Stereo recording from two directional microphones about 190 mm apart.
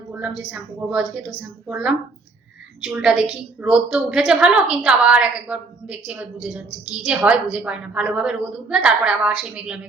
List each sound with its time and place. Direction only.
0.1 s a woman's voice: 5° right (ahead or behind)